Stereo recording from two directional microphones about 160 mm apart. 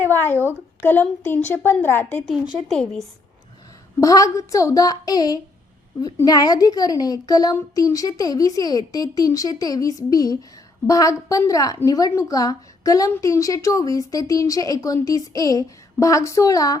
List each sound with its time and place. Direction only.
0.1 s a sound: 15° left (ahead or behind)
0.4 s speech: 15° left (ahead or behind)
2.2 s speech: 5° right (ahead or behind)
4.0 s a child's voice: 20° left (ahead or behind)